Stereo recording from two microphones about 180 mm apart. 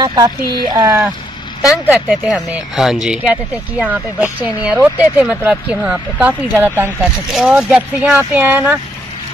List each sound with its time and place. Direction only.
0.0 s speech: 25° right (ahead or behind)